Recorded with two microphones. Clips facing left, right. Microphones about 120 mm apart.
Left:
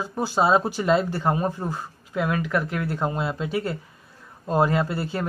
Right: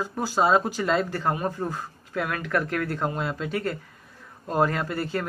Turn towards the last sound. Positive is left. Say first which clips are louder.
# left 3 dB
turn(degrees=25)  # may be behind; listen again after turning